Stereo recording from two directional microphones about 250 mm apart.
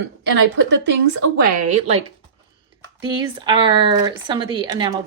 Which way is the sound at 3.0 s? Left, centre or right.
Centre.